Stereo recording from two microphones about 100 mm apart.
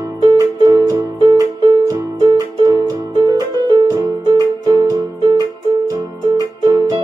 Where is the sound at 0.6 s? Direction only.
35° right (ahead or behind).